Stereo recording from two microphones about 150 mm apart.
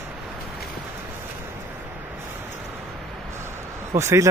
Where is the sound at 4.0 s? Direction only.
20° right (ahead or behind).